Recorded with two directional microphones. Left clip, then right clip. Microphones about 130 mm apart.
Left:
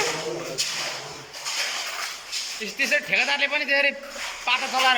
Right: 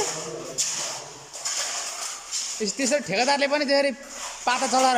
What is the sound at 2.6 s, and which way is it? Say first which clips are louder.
Speech: left 1 dB; 45° right (ahead or behind).